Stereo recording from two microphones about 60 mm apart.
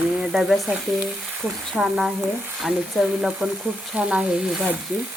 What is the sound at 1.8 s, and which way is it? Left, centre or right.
Frying, centre.